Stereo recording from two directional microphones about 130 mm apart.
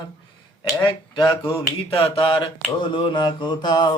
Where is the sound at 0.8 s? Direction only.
35° left (ahead or behind).